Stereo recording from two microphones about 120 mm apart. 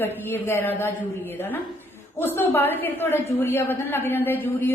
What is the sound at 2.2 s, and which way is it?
A woman's voice, 20° left (ahead or behind).